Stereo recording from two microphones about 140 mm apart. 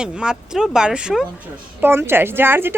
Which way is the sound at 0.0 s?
5° right (ahead or behind).